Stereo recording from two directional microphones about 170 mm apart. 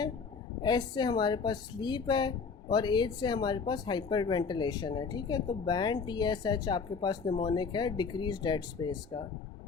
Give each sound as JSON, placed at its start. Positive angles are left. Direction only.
{"t": 0.6, "sound": "a woman's voice", "side_deg": 25}